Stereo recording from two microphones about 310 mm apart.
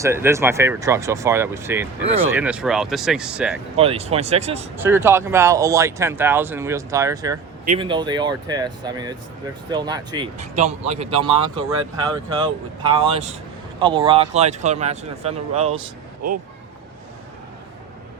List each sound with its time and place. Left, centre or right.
0.0 s speech: centre
3.8 s speech: centre
4.8 s speech: centre; by 16.4 s right